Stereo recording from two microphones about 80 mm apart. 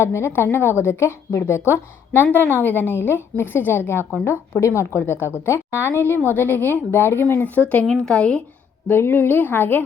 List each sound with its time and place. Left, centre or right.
0.0 s a woman's voice: left; by 8.4 s centre
8.9 s a woman's voice: left